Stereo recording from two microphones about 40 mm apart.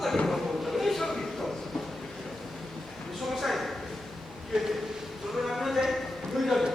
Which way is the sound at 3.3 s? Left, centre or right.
Centre.